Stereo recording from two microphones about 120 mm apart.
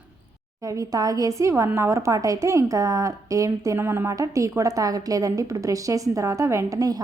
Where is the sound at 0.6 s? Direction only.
30° right (ahead or behind).